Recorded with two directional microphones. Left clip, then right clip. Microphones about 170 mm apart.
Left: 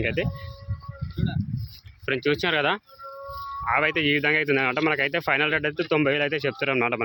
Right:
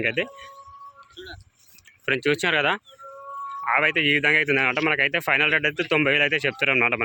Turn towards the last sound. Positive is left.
turn(degrees=10)  # may be behind; listen again after turning